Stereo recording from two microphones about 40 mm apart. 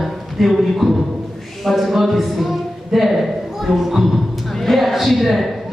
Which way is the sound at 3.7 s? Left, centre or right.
Centre.